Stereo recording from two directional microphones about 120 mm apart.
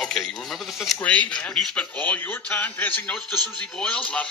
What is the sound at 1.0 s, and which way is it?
A man's voice, 10° left (ahead or behind).